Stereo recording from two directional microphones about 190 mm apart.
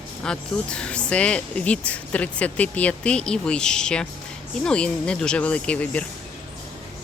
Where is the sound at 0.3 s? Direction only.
5° left (ahead or behind).